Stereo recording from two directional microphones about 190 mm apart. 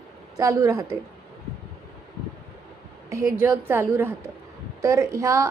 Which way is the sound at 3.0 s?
15° right (ahead or behind).